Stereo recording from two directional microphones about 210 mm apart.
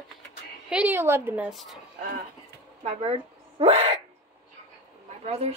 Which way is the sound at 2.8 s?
30° right (ahead or behind).